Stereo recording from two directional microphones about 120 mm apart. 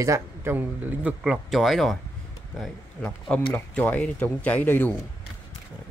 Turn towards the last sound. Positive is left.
turn(degrees=15)  # may be behind; listen again after turning